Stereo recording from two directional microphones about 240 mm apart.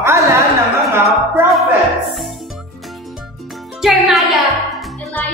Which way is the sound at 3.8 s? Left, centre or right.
Centre.